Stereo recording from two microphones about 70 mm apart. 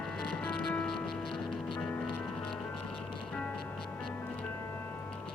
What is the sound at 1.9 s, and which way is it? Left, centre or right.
Music, left.